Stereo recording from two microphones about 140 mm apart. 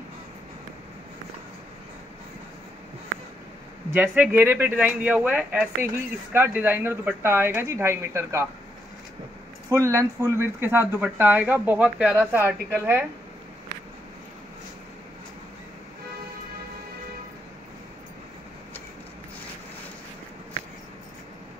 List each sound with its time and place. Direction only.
3.9 s speech: 10° right (ahead or behind)
9.7 s speech: 20° right (ahead or behind)